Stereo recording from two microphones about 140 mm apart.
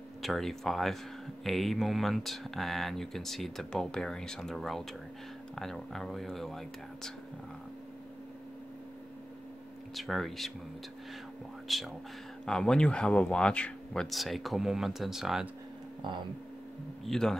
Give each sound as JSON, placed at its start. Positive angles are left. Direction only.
{"t": 0.2, "sound": "speech", "side_deg": 0}
{"t": 9.9, "sound": "speech", "side_deg": 0}
{"t": 11.6, "sound": "speech", "side_deg": 0}
{"t": 16.0, "sound": "speech", "side_deg": -35}
{"t": 17.0, "sound": "speech", "side_deg": 5}